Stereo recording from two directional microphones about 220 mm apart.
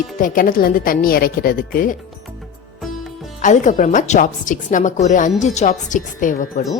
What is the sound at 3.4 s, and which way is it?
Speech, 35° left (ahead or behind).